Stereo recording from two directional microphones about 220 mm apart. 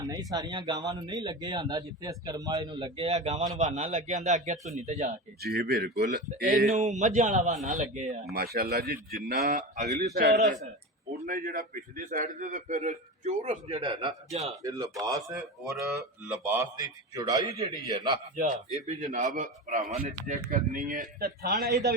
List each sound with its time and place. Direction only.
0.0 s a man's voice: 15° right (ahead or behind)
5.4 s speech: 45° right (ahead or behind)
6.4 s a man's voice: 35° right (ahead or behind); by 18.2 s 20° right (ahead or behind)
18.3 s a man's voice: 35° right (ahead or behind)